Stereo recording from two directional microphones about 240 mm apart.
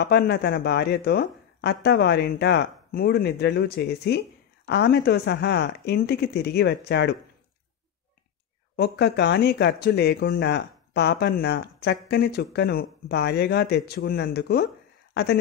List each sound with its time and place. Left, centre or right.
0.0 s speech: left
8.7 s speech: left